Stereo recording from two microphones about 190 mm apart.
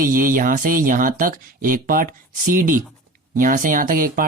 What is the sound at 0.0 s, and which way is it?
Speech, 45° right (ahead or behind).